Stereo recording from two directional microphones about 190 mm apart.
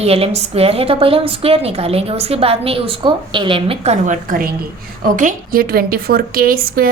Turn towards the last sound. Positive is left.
turn(degrees=-50)  # may be behind; listen again after turning